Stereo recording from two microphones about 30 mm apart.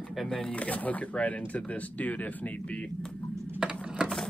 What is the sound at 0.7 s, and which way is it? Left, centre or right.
Speech, left.